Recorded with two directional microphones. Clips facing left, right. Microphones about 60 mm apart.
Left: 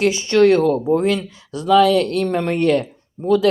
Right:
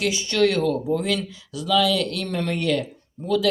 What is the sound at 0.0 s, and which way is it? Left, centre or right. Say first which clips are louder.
Speech: left 7 dB; left.